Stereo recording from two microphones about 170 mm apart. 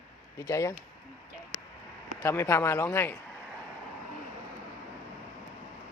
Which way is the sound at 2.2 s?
15° left (ahead or behind).